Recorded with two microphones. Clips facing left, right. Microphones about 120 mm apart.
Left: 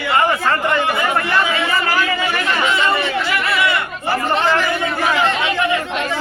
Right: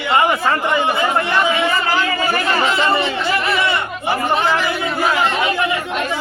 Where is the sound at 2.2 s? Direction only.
40° right (ahead or behind).